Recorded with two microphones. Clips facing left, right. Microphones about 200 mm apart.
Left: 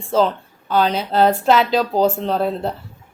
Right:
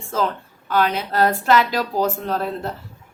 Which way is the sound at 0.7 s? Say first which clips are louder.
Left 2 dB; 25° left (ahead or behind).